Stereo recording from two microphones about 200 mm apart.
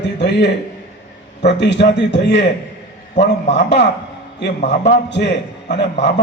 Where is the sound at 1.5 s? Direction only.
60° left (ahead or behind).